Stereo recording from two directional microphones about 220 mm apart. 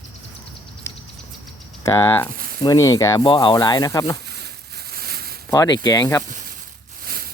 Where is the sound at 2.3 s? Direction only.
40° right (ahead or behind).